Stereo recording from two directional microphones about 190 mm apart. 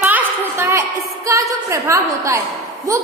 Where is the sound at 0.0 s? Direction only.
10° right (ahead or behind).